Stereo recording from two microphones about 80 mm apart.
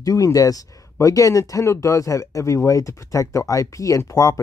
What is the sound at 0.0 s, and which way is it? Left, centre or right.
Speech, left.